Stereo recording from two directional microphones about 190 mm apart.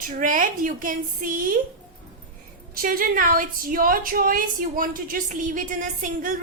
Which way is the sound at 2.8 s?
50° right (ahead or behind).